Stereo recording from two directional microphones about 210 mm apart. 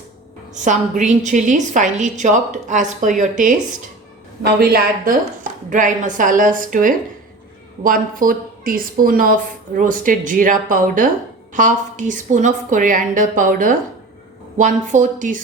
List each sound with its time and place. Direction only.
0.5 s a woman's voice: 35° right (ahead or behind)